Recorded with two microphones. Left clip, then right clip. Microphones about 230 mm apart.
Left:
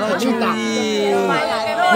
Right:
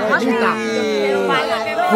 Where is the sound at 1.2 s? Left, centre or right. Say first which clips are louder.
Right 1 dB; right.